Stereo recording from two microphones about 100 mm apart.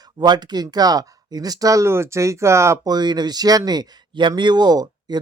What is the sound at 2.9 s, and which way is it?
Speech, 45° right (ahead or behind).